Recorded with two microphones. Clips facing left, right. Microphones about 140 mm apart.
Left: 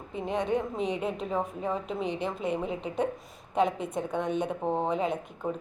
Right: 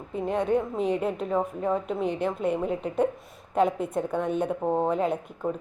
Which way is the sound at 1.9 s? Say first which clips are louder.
Right 4 dB; 55° right (ahead or behind).